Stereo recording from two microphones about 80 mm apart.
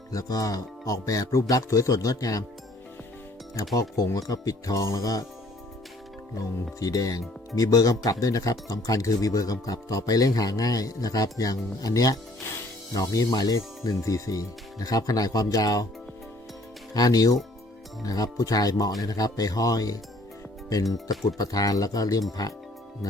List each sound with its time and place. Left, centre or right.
0.1 s speech: left
3.8 s speech: left
6.3 s speech: left
16.9 s speech: left
21.2 s speech: left